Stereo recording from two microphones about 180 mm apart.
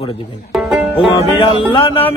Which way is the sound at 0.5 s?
Centre (ahead or behind).